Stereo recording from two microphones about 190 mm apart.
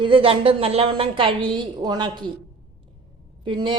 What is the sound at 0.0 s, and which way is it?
A woman's voice, 30° right (ahead or behind).